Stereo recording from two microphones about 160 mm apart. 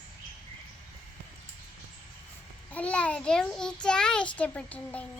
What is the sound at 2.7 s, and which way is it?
A child's voice, 10° left (ahead or behind).